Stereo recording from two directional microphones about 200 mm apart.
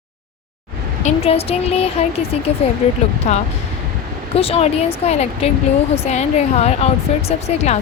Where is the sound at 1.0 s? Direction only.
30° left (ahead or behind).